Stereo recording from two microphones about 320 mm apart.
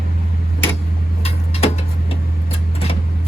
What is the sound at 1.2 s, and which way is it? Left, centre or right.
Tick-tock, centre.